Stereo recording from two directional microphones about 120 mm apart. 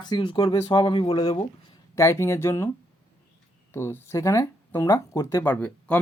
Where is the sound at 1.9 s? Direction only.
25° left (ahead or behind).